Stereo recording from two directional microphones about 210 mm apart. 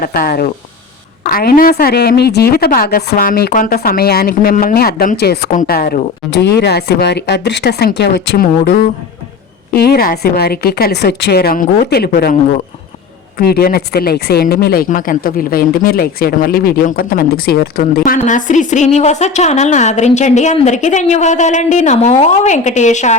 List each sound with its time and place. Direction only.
0.0 s speech: 45° left (ahead or behind)
9.7 s a woman's voice: 50° left (ahead or behind)